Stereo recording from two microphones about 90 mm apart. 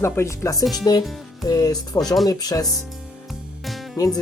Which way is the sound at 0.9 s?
50° left (ahead or behind).